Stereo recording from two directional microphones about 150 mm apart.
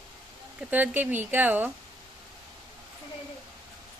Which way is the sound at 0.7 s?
10° right (ahead or behind).